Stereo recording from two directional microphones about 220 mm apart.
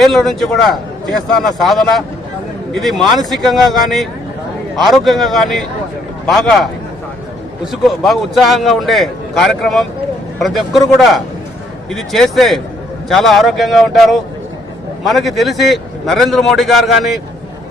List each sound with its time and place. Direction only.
0.0 s a man's voice: centre (ahead or behind)